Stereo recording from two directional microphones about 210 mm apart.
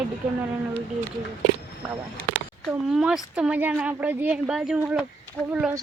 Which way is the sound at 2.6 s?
5° right (ahead or behind).